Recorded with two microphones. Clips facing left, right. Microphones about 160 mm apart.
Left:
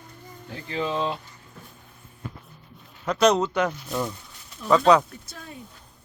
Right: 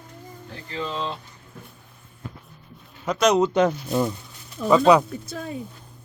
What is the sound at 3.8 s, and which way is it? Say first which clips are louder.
Speech: right 5 dB; 15° right (ahead or behind).